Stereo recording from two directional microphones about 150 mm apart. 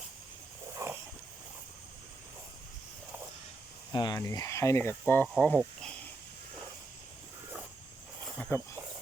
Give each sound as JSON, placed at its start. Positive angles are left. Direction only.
{"t": 0.8, "sound": "a sound", "side_deg": -20}
{"t": 3.9, "sound": "speech", "side_deg": 30}
{"t": 8.4, "sound": "speech", "side_deg": 15}